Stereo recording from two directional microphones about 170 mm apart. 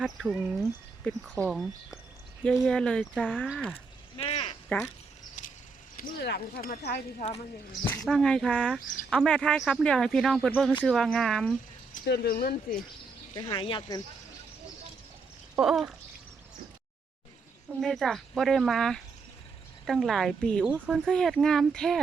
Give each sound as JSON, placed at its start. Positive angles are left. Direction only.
{"t": 0.0, "sound": "speech", "side_deg": 0}
{"t": 4.2, "sound": "a sound", "side_deg": 35}
{"t": 5.4, "sound": "a sound", "side_deg": 45}
{"t": 6.0, "sound": "speech", "side_deg": 55}
{"t": 6.2, "sound": "speech", "side_deg": 70}
{"t": 7.2, "sound": "speech", "side_deg": 40}
{"t": 7.9, "sound": "speech", "side_deg": 5}
{"t": 12.0, "sound": "speech", "side_deg": 70}
{"t": 13.3, "sound": "speech", "side_deg": 25}
{"t": 15.5, "sound": "speech", "side_deg": 0}
{"t": 17.7, "sound": "speech", "side_deg": 0}
{"t": 20.7, "sound": "speech", "side_deg": -5}
{"t": 21.0, "sound": "speech", "side_deg": 5}